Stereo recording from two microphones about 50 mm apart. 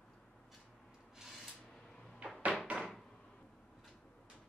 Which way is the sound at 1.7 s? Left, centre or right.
Centre.